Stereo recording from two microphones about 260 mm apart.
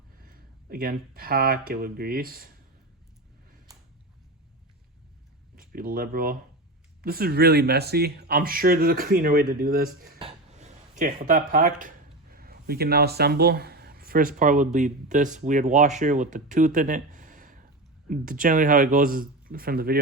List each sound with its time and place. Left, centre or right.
0.2 s speech: right
5.5 s speech: right